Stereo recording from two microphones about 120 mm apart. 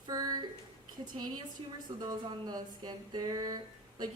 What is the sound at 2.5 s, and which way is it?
A woman's voice, 35° right (ahead or behind).